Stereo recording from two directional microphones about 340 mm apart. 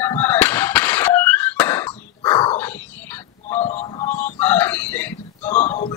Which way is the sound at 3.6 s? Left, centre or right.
Centre.